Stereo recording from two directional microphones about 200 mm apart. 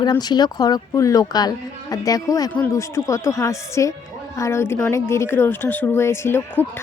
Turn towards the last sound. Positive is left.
turn(degrees=10)  # may be behind; listen again after turning